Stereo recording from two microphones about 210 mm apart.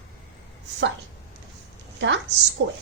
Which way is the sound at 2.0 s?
60° right (ahead or behind).